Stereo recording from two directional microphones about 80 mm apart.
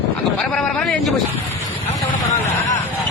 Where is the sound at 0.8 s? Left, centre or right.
Centre.